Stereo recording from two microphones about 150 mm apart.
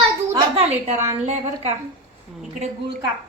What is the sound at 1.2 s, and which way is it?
Speech, 50° right (ahead or behind).